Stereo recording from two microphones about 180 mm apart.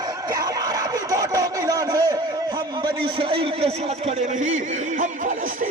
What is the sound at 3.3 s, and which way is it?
Speech, 30° right (ahead or behind).